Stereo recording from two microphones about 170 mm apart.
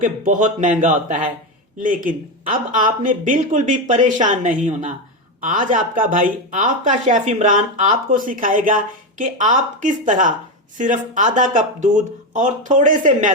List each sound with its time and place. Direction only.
0.0 s speech: 50° right (ahead or behind)